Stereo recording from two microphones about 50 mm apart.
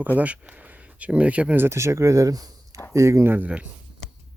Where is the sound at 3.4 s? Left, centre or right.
Right.